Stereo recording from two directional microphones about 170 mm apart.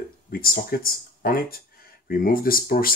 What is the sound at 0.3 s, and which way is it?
Speech, 60° left (ahead or behind).